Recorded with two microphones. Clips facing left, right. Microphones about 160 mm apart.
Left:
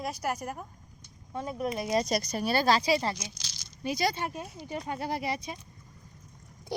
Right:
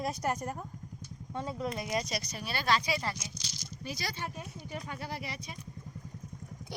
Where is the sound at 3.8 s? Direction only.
20° left (ahead or behind).